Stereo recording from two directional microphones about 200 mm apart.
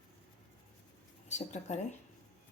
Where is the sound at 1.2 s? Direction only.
35° left (ahead or behind).